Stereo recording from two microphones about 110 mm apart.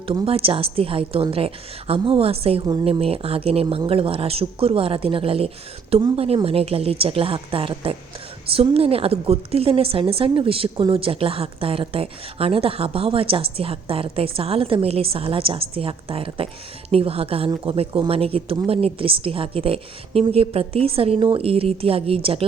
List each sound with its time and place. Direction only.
0.3 s a woman's voice: 60° right (ahead or behind)